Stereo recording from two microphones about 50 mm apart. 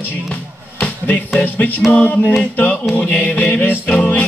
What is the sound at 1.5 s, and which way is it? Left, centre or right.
Speech, left.